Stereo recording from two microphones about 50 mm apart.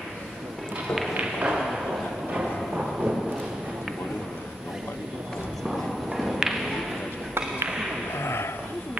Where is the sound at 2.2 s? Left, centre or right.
Centre.